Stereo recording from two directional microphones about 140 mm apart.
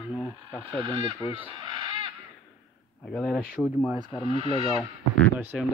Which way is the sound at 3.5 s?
10° right (ahead or behind).